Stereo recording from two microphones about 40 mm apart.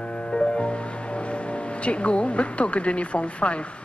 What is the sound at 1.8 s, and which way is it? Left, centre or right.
Speech, left.